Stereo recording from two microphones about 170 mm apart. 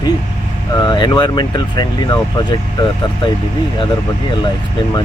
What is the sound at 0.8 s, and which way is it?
Speech, 25° left (ahead or behind).